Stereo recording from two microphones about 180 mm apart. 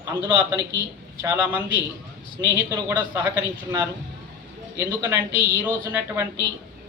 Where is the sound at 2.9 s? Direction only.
20° right (ahead or behind).